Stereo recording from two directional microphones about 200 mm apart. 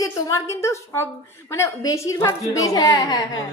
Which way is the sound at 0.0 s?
15° left (ahead or behind).